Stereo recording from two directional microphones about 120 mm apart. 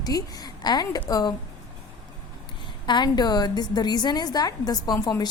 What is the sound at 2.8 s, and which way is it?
A woman's voice, 35° left (ahead or behind).